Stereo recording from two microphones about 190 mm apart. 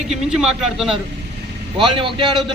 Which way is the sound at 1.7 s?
25° right (ahead or behind).